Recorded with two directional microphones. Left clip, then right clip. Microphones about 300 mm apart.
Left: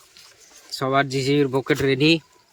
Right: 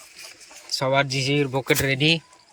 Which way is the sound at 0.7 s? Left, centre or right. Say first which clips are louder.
Even; centre.